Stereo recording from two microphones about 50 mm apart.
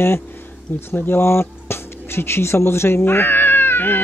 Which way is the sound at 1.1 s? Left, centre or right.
Left.